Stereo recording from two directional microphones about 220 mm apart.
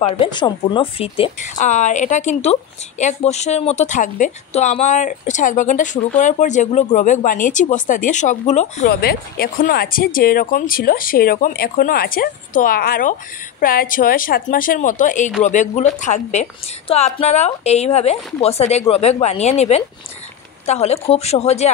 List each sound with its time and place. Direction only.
0.0 s speech: 20° left (ahead or behind)
8.8 s a woman's voice: 45° left (ahead or behind)